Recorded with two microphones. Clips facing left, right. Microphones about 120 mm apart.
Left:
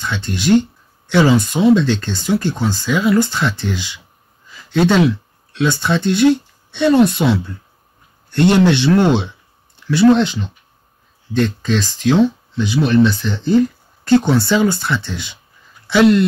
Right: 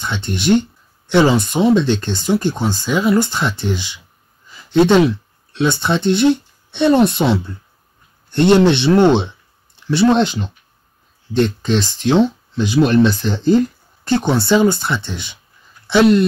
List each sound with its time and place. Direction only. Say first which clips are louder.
0.0 s speech: even; 20° right (ahead or behind)
9.8 s speech: left 2 dB; 35° right (ahead or behind)
12.5 s speech: right 1 dB; 40° right (ahead or behind)
14.0 s speech: left 3 dB; 20° right (ahead or behind)